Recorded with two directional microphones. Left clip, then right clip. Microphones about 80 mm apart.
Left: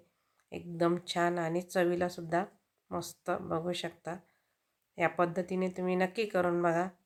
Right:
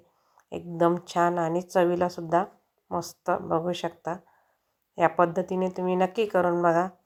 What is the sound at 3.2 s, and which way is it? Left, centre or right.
A woman's voice, centre.